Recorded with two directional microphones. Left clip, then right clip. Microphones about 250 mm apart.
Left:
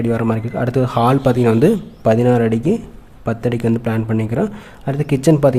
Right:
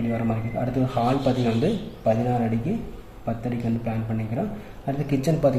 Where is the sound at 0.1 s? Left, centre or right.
Left.